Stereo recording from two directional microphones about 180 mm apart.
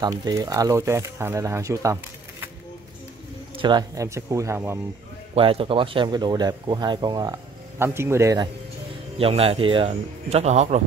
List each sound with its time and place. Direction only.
0.0 s speech: 20° right (ahead or behind)
3.5 s speech: 25° right (ahead or behind)
5.3 s speech: 30° right (ahead or behind)
9.2 s a man's voice: 30° right (ahead or behind)